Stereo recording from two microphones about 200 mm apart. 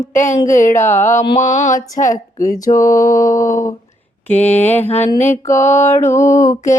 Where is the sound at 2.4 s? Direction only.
15° left (ahead or behind).